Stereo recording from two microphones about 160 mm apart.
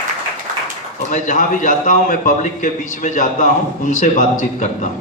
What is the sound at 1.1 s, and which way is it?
A man's voice, 50° left (ahead or behind).